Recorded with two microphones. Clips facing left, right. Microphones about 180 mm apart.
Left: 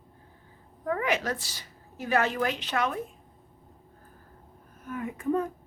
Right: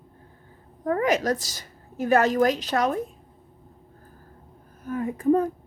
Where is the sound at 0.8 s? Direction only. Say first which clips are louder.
Right 6 dB; 40° right (ahead or behind).